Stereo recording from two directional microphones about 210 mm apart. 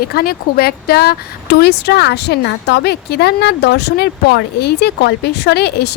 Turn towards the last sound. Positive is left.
turn(degrees=50)  # may be behind; listen again after turning